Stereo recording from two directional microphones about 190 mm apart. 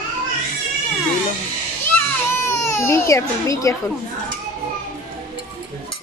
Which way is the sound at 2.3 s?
15° left (ahead or behind).